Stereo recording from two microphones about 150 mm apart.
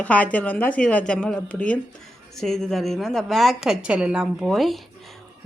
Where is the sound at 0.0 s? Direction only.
10° left (ahead or behind).